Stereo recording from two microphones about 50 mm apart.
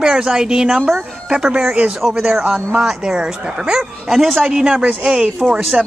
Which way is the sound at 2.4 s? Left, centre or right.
Right.